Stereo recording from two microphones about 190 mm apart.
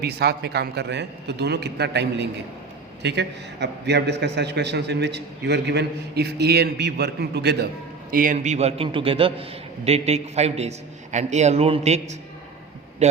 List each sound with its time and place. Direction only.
0.0 s a man's voice: 60° right (ahead or behind)
8.1 s a man's voice: 45° right (ahead or behind)